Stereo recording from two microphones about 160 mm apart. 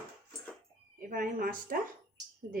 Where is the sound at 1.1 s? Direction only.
65° right (ahead or behind).